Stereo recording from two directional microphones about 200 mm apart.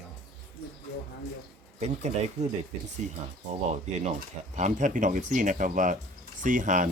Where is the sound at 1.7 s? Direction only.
35° right (ahead or behind).